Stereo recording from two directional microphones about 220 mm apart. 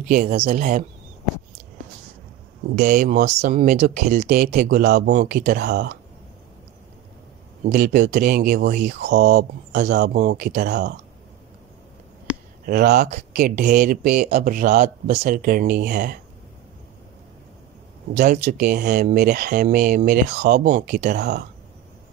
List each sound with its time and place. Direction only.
0.1 s speech: 40° right (ahead or behind)
2.7 s speech: 35° right (ahead or behind); by 5.9 s 50° right (ahead or behind)
7.6 s speech: 40° right (ahead or behind)
12.6 s speech: 45° right (ahead or behind)
18.1 s speech: 35° right (ahead or behind)
20.3 s speech: 45° right (ahead or behind)
20.7 s speech: 35° right (ahead or behind)
21.2 s speech: 50° right (ahead or behind)